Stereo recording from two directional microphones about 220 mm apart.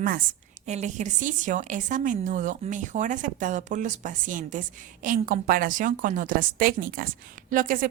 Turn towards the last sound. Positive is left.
turn(degrees=-40)  # may be behind; listen again after turning